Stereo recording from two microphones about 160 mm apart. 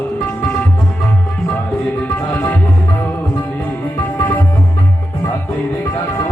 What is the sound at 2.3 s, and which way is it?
Music, 10° left (ahead or behind).